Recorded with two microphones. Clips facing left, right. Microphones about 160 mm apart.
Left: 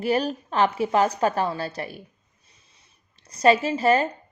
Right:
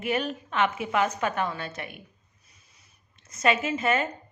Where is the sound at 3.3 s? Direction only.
35° left (ahead or behind).